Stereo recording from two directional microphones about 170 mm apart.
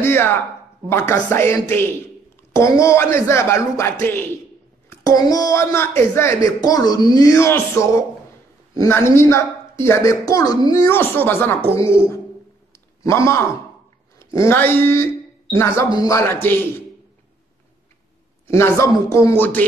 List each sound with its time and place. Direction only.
0.0 s a sound: 15° left (ahead or behind)
0.8 s speech: 15° left (ahead or behind)
13.0 s speech: 15° left (ahead or behind)
18.5 s speech: 15° left (ahead or behind)